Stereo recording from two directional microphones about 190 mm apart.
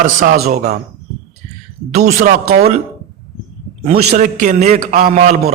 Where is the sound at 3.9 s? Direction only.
40° right (ahead or behind).